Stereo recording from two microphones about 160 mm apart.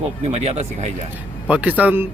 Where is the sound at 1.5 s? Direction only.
10° right (ahead or behind).